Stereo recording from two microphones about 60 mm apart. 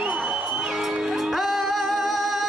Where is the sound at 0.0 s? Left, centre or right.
Centre.